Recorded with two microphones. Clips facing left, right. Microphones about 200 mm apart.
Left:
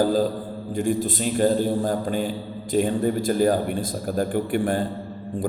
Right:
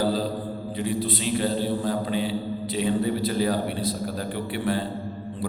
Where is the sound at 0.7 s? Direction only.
45° left (ahead or behind).